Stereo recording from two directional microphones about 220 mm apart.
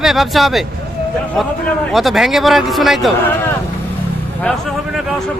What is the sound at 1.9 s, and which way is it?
Speech, centre (ahead or behind).